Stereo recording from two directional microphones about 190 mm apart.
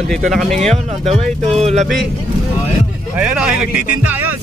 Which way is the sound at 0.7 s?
30° right (ahead or behind).